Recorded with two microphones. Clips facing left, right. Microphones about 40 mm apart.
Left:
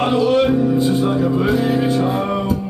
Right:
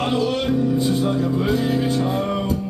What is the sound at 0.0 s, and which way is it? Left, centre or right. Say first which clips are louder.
Music: left 6 dB; centre.